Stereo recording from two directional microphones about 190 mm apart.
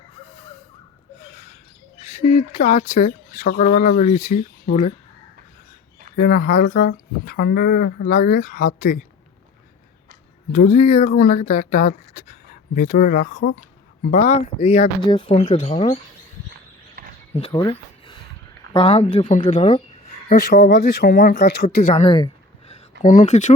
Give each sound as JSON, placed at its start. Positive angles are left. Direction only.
{"t": 2.0, "sound": "speech", "side_deg": 40}
{"t": 6.1, "sound": "speech", "side_deg": 50}
{"t": 10.5, "sound": "speech", "side_deg": 40}
{"t": 17.5, "sound": "speech", "side_deg": 25}
{"t": 19.6, "sound": "a sound", "side_deg": 30}
{"t": 20.2, "sound": "speech", "side_deg": 45}
{"t": 22.0, "sound": "speech", "side_deg": 25}
{"t": 22.7, "sound": "speech", "side_deg": 40}